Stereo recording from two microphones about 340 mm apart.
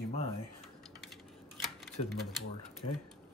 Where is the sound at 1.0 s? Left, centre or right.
Centre.